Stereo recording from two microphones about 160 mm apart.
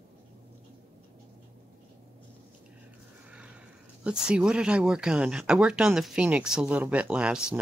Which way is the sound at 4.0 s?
5° right (ahead or behind).